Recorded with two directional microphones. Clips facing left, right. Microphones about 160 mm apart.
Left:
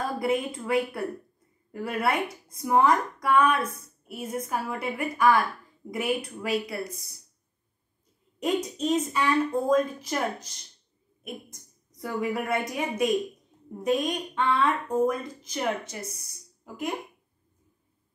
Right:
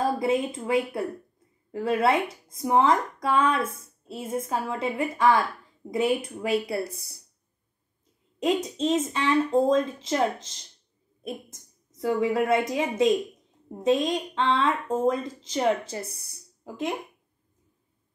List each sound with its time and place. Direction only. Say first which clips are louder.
0.0 s a woman's voice: right 3 dB; 20° right (ahead or behind)
8.4 s a woman's voice: right 2 dB; 25° right (ahead or behind)